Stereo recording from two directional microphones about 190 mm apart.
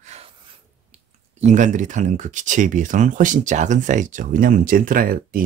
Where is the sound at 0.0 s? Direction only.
35° right (ahead or behind).